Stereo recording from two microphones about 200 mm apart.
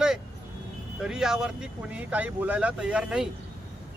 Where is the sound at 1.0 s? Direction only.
Centre (ahead or behind).